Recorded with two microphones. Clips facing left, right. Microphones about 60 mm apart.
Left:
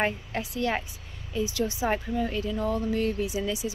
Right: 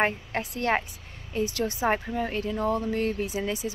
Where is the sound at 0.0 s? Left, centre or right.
Right.